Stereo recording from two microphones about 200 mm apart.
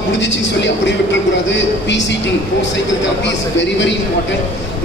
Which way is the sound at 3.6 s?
65° left (ahead or behind).